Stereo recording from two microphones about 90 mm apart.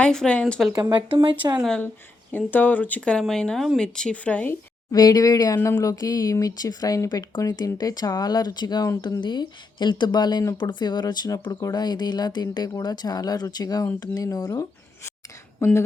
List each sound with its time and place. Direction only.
0.0 s speech: 10° left (ahead or behind)
0.7 s speech: 55° right (ahead or behind)
2.3 s speech: 20° left (ahead or behind)
4.9 s speech: 45° left (ahead or behind)
15.6 s speech: 30° left (ahead or behind)